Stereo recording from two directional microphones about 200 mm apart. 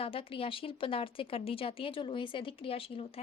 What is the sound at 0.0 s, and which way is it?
Speech, 25° left (ahead or behind).